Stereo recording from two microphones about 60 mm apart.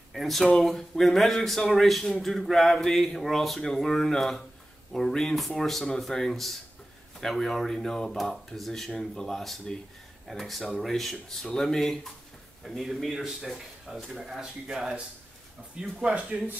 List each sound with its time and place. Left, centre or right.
0.1 s speech: centre
16.0 s speech: centre